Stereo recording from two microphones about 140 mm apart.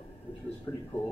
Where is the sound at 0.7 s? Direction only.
25° left (ahead or behind).